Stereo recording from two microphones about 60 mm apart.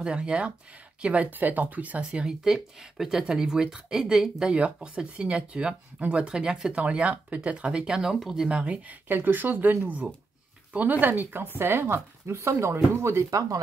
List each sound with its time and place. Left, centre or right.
0.0 s speech: centre
2.0 s speech: centre
8.5 s speech: centre; by 13.6 s right